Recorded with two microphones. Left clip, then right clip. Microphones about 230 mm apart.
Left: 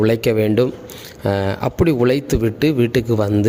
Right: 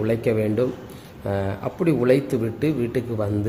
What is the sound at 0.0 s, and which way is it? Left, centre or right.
Speech, left.